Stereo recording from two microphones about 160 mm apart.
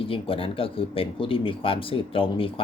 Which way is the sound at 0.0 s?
35° left (ahead or behind).